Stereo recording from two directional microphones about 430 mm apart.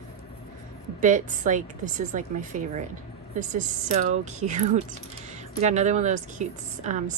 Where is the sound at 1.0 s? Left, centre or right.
Centre.